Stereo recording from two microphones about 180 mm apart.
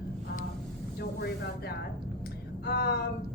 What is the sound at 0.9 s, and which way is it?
A woman's voice, 60° left (ahead or behind).